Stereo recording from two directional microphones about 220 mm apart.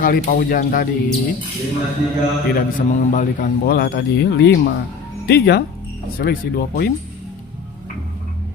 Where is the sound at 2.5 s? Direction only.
40° left (ahead or behind).